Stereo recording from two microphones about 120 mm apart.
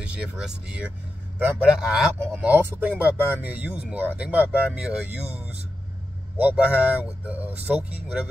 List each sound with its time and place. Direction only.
0.0 s speech: 10° right (ahead or behind)
2.4 s speech: 15° right (ahead or behind)
6.3 s speech: 10° right (ahead or behind)